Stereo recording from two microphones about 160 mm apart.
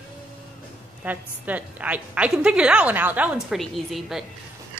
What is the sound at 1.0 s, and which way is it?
A woman's voice, 10° right (ahead or behind).